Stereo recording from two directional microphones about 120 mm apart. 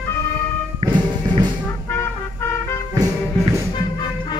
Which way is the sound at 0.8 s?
40° right (ahead or behind).